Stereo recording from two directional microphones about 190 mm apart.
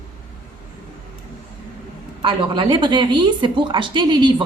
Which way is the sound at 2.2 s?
25° right (ahead or behind).